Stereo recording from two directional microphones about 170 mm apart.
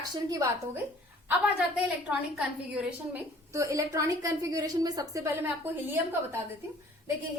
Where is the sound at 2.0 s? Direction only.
5° right (ahead or behind).